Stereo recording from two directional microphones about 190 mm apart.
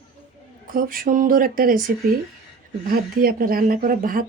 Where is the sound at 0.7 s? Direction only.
50° right (ahead or behind).